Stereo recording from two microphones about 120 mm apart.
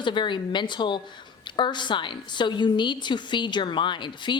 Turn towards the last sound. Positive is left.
turn(degrees=40)  # may be behind; listen again after turning